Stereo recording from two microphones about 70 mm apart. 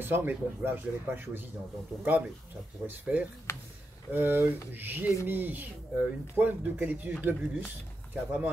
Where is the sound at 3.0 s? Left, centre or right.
Right.